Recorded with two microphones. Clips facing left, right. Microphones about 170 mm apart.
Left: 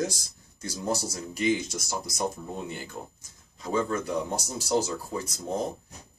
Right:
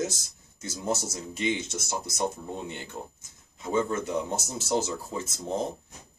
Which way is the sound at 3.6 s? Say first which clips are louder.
Right 1 dB; 25° right (ahead or behind).